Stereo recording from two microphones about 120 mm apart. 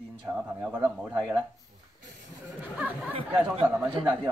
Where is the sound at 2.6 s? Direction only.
10° right (ahead or behind).